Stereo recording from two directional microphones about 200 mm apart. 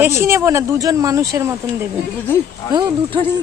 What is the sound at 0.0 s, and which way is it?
Speech, 10° right (ahead or behind).